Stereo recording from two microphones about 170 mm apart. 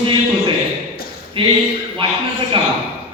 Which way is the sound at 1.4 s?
30° right (ahead or behind).